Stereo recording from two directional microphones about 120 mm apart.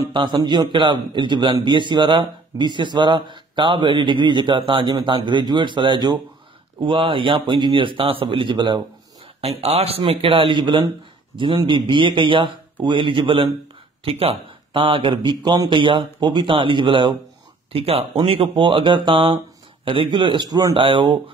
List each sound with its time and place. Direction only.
0.1 s a man's voice: 40° right (ahead or behind)
9.4 s a man's voice: 60° right (ahead or behind); by 17.1 s 40° right (ahead or behind)
17.7 s a man's voice: 55° right (ahead or behind)